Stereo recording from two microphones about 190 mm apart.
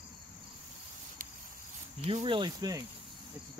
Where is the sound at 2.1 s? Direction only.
30° right (ahead or behind).